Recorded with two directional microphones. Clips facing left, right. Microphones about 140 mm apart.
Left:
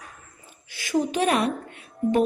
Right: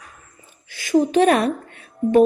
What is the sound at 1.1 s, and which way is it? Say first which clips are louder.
Speech: right 7 dB; 50° right (ahead or behind).